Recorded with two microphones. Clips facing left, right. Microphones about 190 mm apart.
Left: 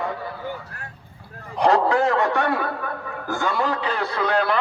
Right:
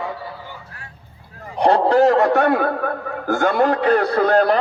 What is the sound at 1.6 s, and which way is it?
A man's voice, 35° right (ahead or behind).